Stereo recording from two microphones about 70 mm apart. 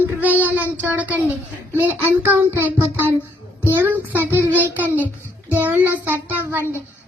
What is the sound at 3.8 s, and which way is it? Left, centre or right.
A woman's voice, right.